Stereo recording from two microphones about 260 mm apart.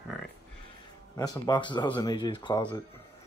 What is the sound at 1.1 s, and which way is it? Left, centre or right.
Speech, centre.